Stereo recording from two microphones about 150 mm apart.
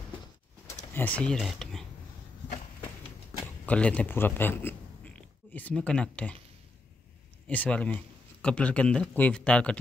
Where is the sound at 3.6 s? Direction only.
10° left (ahead or behind).